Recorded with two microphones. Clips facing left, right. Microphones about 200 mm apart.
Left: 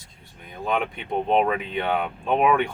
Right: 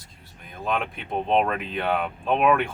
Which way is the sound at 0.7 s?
Centre (ahead or behind).